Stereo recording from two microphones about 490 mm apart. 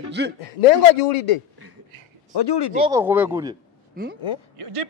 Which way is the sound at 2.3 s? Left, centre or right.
Left.